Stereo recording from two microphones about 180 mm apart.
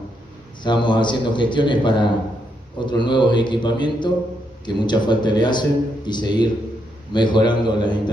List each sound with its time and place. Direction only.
0.7 s a man's voice: 25° left (ahead or behind)